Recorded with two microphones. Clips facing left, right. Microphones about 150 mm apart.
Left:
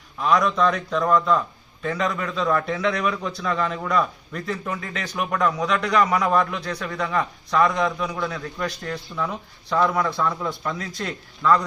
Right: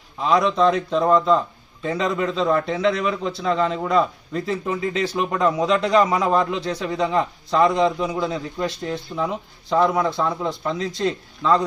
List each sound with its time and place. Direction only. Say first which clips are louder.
0.2 s a man's voice: right 2 dB; 25° right (ahead or behind)